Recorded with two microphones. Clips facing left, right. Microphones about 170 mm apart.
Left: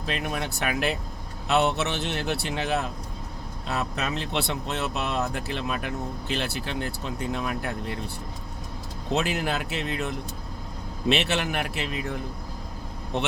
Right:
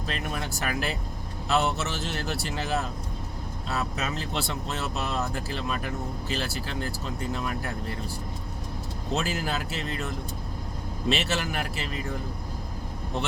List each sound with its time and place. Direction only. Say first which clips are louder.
0.1 s speech: left 4 dB; 60° left (ahead or behind)
9.1 s speech: left 3 dB; 65° left (ahead or behind)